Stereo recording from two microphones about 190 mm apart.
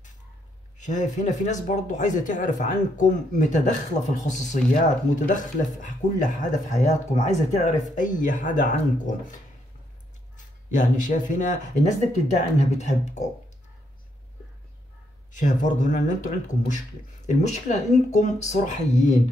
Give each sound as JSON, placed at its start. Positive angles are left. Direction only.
{"t": 0.7, "sound": "speech", "side_deg": 40}
{"t": 15.3, "sound": "speech", "side_deg": 40}